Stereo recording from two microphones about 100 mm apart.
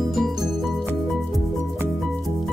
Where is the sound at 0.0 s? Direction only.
Centre (ahead or behind).